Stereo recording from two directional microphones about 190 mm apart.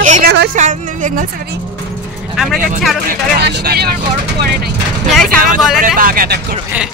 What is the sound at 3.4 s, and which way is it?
Speech, 60° right (ahead or behind).